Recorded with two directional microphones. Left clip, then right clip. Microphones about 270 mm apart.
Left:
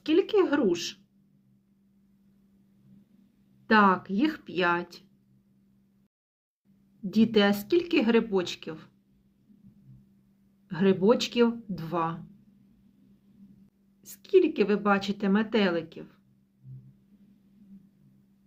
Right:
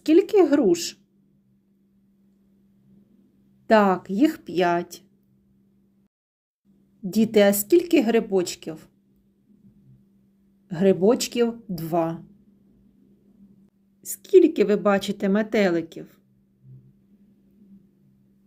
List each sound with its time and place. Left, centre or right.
0.0 s speech: centre
3.7 s a woman's voice: centre
7.1 s speech: centre
10.7 s speech: centre
14.0 s a woman's voice: right